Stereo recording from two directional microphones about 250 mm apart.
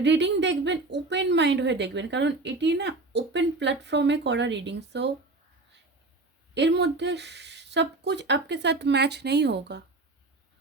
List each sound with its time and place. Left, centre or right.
0.0 s speech: right
6.5 s speech: right